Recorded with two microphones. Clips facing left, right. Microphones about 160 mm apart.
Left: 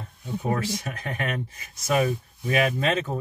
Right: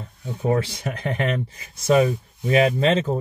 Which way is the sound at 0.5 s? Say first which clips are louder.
Right 6 dB; 30° right (ahead or behind).